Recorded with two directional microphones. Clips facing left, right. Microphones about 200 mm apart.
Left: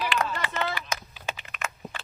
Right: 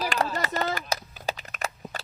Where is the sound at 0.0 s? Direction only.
40° right (ahead or behind).